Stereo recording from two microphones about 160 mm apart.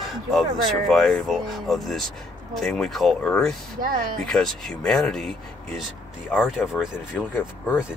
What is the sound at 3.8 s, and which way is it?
Speech, 60° right (ahead or behind).